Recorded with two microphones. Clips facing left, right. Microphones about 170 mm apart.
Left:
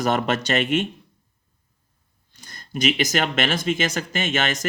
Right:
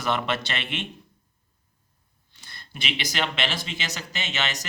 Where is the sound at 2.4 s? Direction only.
40° left (ahead or behind).